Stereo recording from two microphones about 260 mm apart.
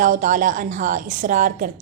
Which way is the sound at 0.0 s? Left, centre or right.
Right.